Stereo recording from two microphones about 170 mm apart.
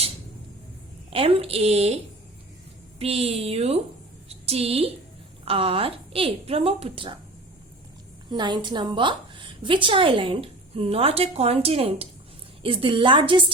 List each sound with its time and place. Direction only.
1.1 s a woman's voice: 35° right (ahead or behind)
3.0 s a woman's voice: 35° right (ahead or behind)
8.3 s a woman's voice: 25° right (ahead or behind)